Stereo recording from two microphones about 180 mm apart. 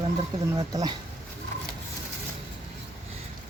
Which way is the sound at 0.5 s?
25° right (ahead or behind).